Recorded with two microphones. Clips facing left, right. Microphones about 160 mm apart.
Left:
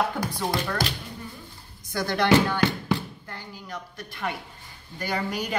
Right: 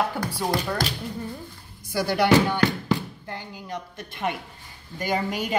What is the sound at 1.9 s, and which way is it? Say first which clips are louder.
Speech: right 1 dB; 10° right (ahead or behind).